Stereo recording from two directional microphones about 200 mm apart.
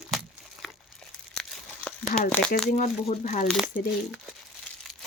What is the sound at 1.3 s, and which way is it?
Crumpling, 5° left (ahead or behind).